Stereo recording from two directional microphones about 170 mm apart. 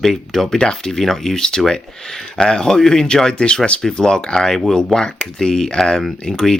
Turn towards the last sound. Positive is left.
turn(degrees=5)  # may be behind; listen again after turning